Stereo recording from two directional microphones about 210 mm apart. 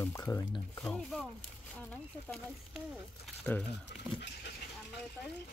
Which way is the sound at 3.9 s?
50° left (ahead or behind).